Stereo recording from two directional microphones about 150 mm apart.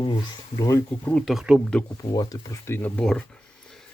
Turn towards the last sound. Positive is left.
turn(degrees=5)  # may be behind; listen again after turning